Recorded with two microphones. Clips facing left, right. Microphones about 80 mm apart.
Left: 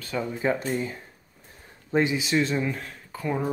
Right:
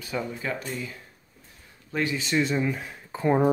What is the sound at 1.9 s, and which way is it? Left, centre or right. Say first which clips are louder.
Speech: left 5 dB; left.